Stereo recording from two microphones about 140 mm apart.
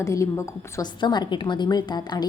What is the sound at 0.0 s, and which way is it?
A woman's voice, 20° left (ahead or behind).